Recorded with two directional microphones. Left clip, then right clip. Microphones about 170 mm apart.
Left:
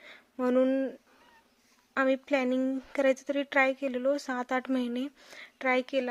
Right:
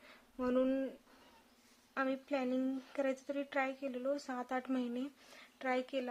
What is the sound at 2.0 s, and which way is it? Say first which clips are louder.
Speech: left 10 dB; 40° left (ahead or behind).